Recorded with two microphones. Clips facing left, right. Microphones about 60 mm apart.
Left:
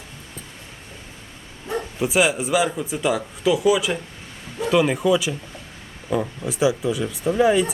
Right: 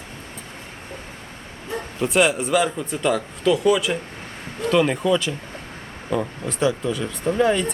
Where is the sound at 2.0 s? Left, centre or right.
Centre.